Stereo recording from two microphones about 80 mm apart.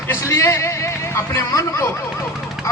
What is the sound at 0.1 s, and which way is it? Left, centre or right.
A man's voice, left.